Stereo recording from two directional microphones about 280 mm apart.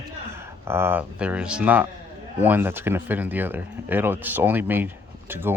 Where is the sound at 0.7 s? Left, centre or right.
Centre.